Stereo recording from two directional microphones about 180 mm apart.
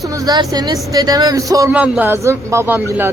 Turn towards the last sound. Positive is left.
turn(degrees=-10)  # may be behind; listen again after turning